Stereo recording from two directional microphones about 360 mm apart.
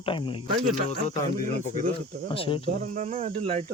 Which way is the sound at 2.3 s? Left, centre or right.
Centre.